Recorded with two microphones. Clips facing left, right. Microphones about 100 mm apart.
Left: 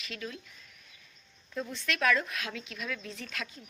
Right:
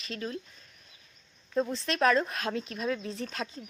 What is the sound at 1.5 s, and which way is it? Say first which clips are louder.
Speech: right 6 dB; 35° right (ahead or behind).